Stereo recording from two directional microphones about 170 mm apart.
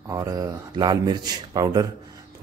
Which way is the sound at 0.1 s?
20° right (ahead or behind).